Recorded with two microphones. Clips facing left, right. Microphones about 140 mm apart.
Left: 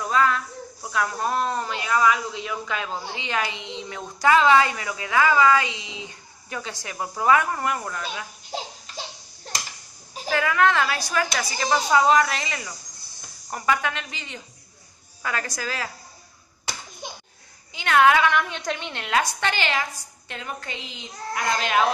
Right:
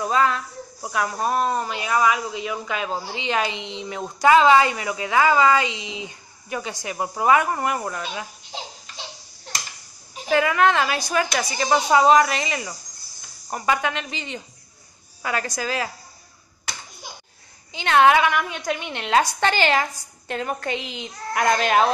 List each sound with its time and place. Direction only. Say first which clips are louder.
0.0 s a sound: right 1 dB; 25° right (ahead or behind)
0.8 s a woman's voice: right 2 dB; 15° right (ahead or behind)
10.3 s a woman's voice: right 3 dB; 20° right (ahead or behind)
17.7 s a woman's voice: right 2 dB; 25° right (ahead or behind)
18.3 s speech: right 1 dB; 10° right (ahead or behind)
19.0 s a woman's voice: right 4 dB; 35° right (ahead or behind)